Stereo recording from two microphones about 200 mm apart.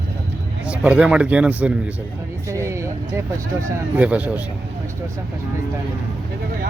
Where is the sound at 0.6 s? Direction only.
5° right (ahead or behind).